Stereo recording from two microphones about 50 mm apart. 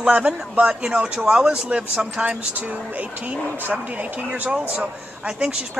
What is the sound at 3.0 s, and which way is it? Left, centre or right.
Speech, right.